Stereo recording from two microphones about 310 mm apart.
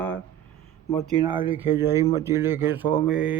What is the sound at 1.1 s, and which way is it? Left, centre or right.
Speech, centre.